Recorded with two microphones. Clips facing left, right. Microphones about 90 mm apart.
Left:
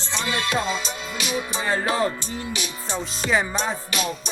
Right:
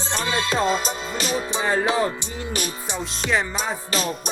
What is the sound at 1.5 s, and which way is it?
Music, 20° right (ahead or behind).